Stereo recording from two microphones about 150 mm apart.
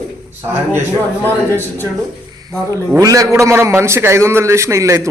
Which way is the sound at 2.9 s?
20° right (ahead or behind).